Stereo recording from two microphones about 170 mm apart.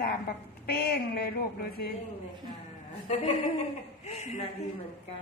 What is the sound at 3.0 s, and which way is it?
A woman's voice, 40° left (ahead or behind).